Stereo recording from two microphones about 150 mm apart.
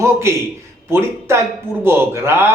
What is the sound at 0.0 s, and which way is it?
A man's voice, 15° right (ahead or behind).